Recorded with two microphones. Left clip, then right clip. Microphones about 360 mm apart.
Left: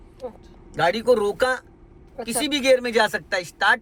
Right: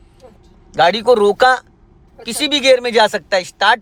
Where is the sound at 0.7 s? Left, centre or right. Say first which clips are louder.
Right 7 dB; centre.